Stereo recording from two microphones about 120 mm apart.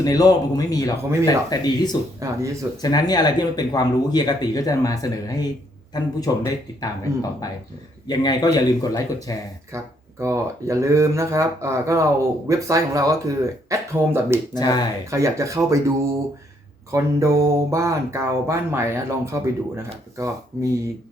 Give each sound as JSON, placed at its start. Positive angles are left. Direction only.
{"t": 0.0, "sound": "speech", "side_deg": 30}
{"t": 2.2, "sound": "speech", "side_deg": -25}
{"t": 2.8, "sound": "speech", "side_deg": 35}
{"t": 9.7, "sound": "speech", "side_deg": -25}
{"t": 14.5, "sound": "speech", "side_deg": 35}
{"t": 15.1, "sound": "speech", "side_deg": -25}
{"t": 16.9, "sound": "speech", "side_deg": -25}
{"t": 20.5, "sound": "speech", "side_deg": -25}